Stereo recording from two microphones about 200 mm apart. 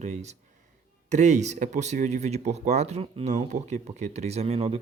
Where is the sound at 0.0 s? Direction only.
35° right (ahead or behind).